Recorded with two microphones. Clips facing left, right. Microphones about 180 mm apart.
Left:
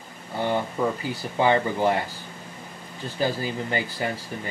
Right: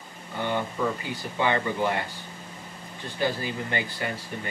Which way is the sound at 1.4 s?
30° left (ahead or behind).